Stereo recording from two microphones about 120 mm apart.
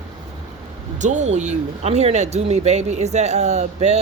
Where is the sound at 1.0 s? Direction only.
85° right.